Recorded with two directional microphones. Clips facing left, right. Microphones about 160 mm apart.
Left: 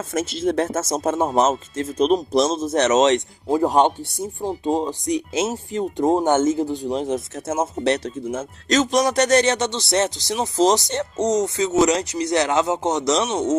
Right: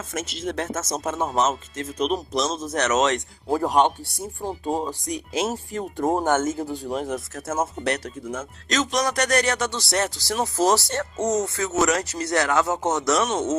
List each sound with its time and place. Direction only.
0.1 s speech: 35° left (ahead or behind); by 13.6 s 15° left (ahead or behind)